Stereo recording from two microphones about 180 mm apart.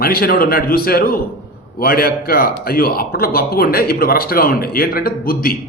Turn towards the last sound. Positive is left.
turn(degrees=55)  # may be behind; listen again after turning